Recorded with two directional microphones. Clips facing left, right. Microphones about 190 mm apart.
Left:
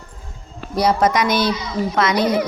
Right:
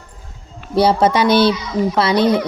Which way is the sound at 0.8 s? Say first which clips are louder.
Right 3 dB; 30° right (ahead or behind).